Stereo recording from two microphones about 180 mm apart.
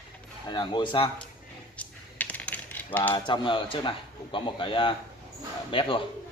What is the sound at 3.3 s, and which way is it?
A man's voice, 25° left (ahead or behind).